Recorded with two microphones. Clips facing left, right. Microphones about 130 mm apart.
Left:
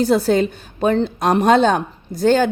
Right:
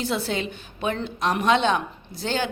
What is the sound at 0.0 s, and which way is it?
A woman's voice, 40° left (ahead or behind).